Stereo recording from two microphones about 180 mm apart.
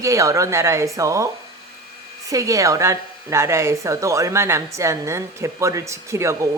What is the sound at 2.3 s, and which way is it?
A woman's voice, 20° right (ahead or behind).